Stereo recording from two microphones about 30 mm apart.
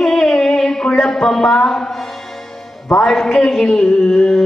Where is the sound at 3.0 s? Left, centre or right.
Centre.